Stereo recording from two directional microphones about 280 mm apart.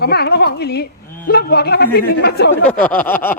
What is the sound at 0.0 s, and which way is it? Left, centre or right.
Speech, left.